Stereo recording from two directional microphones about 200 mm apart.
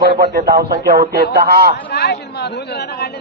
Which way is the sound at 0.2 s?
55° right (ahead or behind).